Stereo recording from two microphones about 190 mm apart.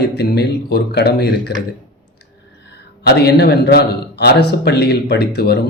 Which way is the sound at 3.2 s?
60° left (ahead or behind).